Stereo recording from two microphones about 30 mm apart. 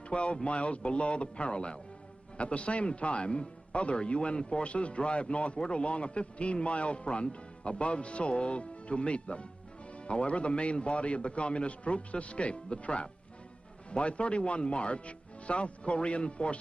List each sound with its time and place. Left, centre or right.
0.1 s a man's voice: left
5.5 s a man's voice: left
5.8 s a man's voice: left